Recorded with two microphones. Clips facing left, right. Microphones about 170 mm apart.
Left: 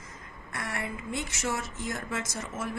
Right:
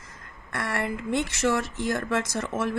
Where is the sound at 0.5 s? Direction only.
70° right (ahead or behind).